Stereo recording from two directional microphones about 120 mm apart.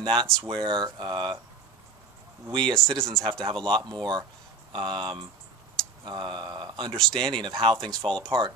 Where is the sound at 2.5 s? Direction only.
40° right (ahead or behind).